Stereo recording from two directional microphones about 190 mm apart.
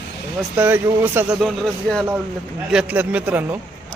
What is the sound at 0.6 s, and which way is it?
Speech, 10° right (ahead or behind).